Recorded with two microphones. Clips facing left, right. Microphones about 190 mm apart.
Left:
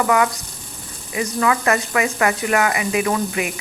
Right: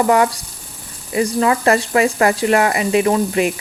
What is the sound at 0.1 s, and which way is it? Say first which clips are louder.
Speech: right 3 dB; 35° right (ahead or behind).